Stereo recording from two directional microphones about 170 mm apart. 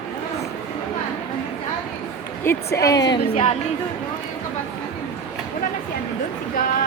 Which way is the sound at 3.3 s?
35° left (ahead or behind).